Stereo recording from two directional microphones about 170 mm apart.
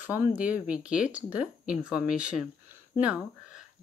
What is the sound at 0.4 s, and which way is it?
Speech, 10° right (ahead or behind).